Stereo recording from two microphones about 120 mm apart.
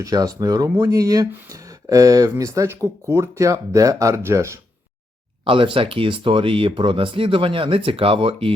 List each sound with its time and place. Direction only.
0.0 s speech: 30° right (ahead or behind)
5.5 s speech: 45° right (ahead or behind)